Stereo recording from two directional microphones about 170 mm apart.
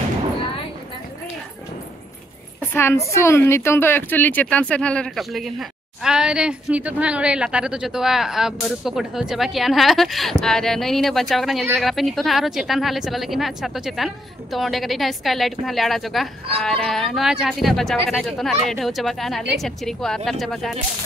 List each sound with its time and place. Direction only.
2.7 s a woman's voice: 15° left (ahead or behind)